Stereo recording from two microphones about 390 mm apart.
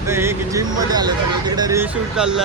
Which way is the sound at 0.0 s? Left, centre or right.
Centre.